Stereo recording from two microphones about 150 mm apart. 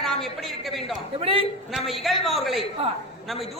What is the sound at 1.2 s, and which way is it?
Speech, 40° right (ahead or behind).